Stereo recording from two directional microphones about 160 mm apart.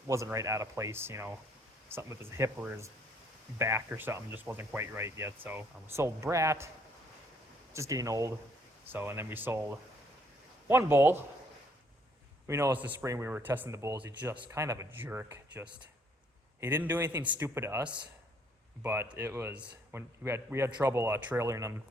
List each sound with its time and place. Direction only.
0.1 s speech: 20° right (ahead or behind)
7.7 s speech: 20° right (ahead or behind)
12.5 s speech: 15° right (ahead or behind)
17.8 s speech: 30° right (ahead or behind)
18.8 s speech: 15° right (ahead or behind)